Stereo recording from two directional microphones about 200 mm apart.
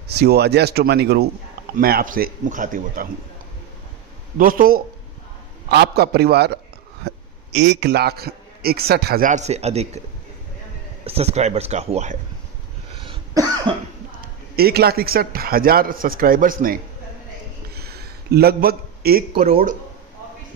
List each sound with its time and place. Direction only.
0.1 s a man's voice: 55° right (ahead or behind)
4.4 s a man's voice: 45° right (ahead or behind)
11.1 s speech: 30° right (ahead or behind)
12.9 s cough: 25° right (ahead or behind)
14.5 s a man's voice: 50° right (ahead or behind)
17.7 s a sound: 50° right (ahead or behind)
19.4 s speech: 35° right (ahead or behind)